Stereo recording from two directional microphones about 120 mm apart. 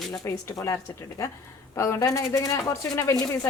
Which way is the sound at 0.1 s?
25° left (ahead or behind).